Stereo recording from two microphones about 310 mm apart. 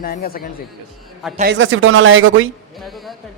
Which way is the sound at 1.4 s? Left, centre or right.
Right.